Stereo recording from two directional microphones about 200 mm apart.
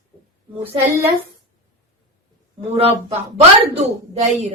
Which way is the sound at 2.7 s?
30° right (ahead or behind).